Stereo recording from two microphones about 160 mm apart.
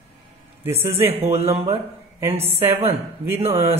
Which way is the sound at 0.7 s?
15° right (ahead or behind).